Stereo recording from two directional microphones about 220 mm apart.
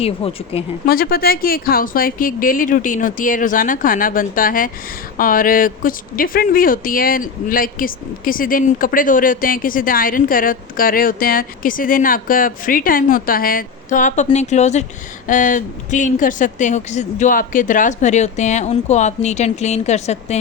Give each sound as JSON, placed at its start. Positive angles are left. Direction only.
{"t": 0.2, "sound": "speech", "side_deg": 25}
{"t": 0.9, "sound": "speech", "side_deg": 45}